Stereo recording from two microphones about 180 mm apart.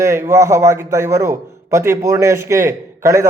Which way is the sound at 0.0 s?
15° right (ahead or behind).